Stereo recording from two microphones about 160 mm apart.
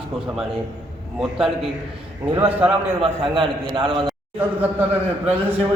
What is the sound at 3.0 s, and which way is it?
A man's voice, 30° right (ahead or behind).